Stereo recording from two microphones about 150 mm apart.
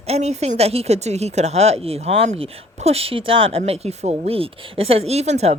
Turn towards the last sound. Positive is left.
turn(degrees=-45)  # may be behind; listen again after turning